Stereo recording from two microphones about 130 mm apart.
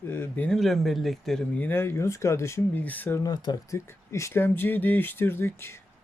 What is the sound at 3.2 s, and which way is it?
Speech, 30° left (ahead or behind).